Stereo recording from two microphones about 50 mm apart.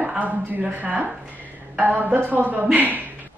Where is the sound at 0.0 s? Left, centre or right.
Right.